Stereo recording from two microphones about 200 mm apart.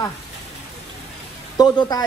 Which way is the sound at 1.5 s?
20° left (ahead or behind).